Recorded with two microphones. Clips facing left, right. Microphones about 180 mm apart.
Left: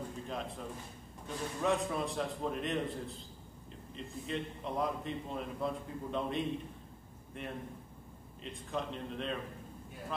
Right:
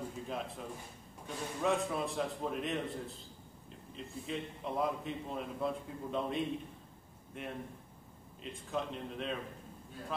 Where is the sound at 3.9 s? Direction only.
Centre (ahead or behind).